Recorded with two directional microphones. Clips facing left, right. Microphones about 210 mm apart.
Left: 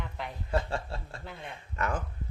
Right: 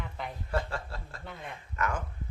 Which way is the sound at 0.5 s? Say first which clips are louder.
Left 3 dB; 25° left (ahead or behind).